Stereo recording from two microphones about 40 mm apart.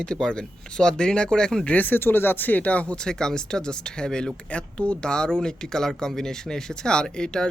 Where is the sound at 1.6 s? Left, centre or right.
Left.